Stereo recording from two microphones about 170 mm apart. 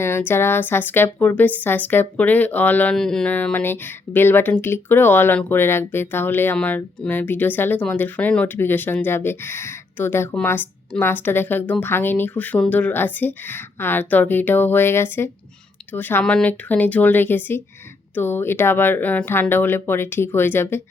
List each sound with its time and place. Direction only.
0.0 s a woman's voice: 15° left (ahead or behind)